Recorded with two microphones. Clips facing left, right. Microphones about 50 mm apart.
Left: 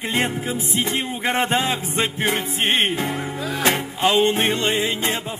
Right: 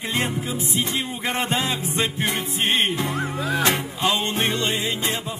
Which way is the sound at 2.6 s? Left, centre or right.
Left.